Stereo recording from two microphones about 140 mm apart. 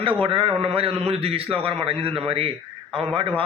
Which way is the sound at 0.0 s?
40° right (ahead or behind).